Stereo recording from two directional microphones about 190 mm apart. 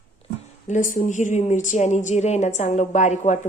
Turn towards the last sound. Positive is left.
turn(degrees=40)  # may be behind; listen again after turning